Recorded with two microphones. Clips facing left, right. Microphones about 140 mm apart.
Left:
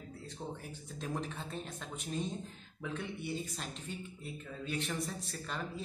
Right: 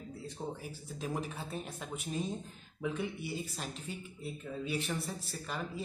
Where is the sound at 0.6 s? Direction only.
5° right (ahead or behind).